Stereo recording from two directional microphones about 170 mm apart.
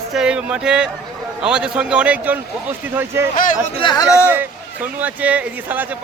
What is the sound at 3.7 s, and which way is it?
Speech, 25° left (ahead or behind).